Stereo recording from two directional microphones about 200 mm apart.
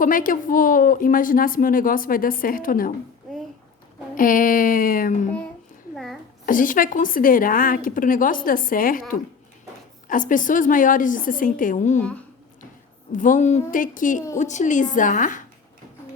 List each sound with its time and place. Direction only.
0.0 s speech: 45° left (ahead or behind)
4.1 s speech: 45° left (ahead or behind)
6.4 s a woman's voice: 40° left (ahead or behind)
13.1 s a woman's voice: 40° left (ahead or behind)